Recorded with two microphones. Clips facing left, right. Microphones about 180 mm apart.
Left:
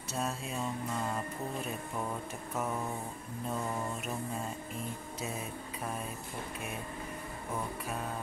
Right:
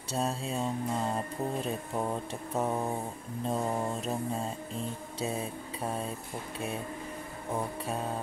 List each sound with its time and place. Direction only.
0.1 s music: 30° right (ahead or behind)